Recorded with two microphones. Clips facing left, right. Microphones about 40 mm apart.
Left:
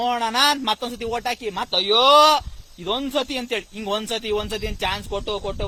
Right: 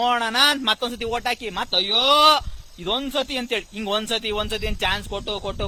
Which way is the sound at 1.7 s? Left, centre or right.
Centre.